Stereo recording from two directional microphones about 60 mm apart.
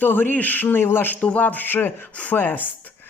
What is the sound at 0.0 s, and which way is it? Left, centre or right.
Speech, left.